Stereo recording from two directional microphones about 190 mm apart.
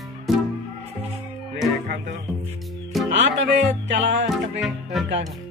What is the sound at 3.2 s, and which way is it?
Speech, 65° right (ahead or behind).